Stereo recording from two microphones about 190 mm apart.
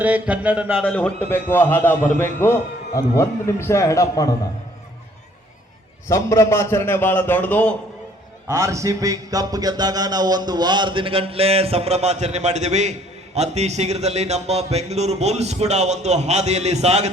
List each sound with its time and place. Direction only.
0.0 s speech: 5° right (ahead or behind)
0.9 s a man's voice: 5° left (ahead or behind)
6.1 s a man's voice: 15° left (ahead or behind)
8.4 s music: 15° right (ahead or behind); by 17.1 s 35° right (ahead or behind)